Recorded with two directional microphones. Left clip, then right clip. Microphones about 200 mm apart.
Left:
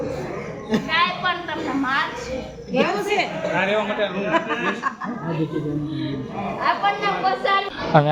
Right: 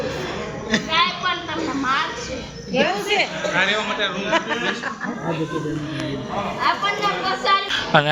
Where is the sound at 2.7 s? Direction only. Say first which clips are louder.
Right 1 dB; 50° left (ahead or behind).